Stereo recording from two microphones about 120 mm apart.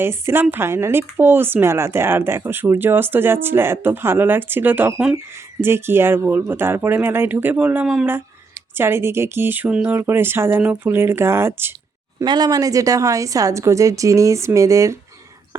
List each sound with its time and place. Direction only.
0.0 s speech: 20° right (ahead or behind)
12.2 s speech: 35° right (ahead or behind)